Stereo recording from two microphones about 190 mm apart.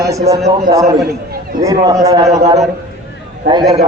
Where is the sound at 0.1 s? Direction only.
15° right (ahead or behind).